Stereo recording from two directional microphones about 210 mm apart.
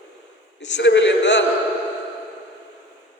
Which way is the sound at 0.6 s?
60° left (ahead or behind).